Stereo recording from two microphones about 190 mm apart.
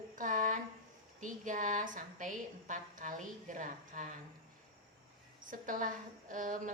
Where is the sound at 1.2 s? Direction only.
40° right (ahead or behind).